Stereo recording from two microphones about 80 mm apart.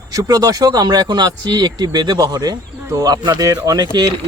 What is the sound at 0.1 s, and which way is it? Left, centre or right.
Speech, right.